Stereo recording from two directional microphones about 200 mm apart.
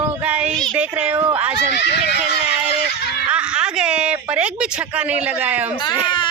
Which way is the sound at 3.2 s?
5° right (ahead or behind).